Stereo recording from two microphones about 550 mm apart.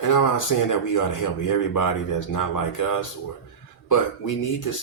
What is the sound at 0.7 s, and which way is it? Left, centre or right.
Speech, left.